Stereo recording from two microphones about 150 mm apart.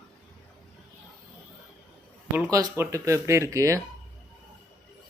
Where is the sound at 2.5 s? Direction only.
20° right (ahead or behind).